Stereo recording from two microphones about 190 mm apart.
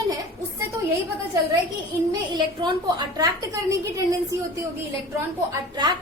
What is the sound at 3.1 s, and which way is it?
Speech, 20° right (ahead or behind).